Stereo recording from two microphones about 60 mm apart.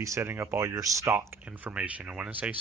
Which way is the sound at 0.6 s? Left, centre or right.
Right.